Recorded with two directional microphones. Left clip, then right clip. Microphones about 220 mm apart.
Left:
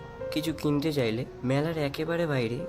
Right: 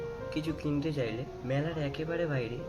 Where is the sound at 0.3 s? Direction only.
50° left (ahead or behind).